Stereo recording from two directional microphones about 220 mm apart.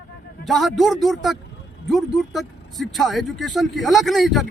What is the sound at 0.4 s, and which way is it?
Speech, centre (ahead or behind).